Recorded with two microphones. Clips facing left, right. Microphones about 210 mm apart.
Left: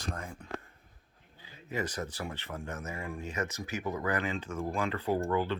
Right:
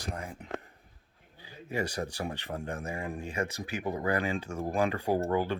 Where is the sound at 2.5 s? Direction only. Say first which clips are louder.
Right 4 dB; 35° right (ahead or behind).